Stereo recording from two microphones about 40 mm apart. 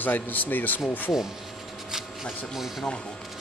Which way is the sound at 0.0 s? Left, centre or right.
Left.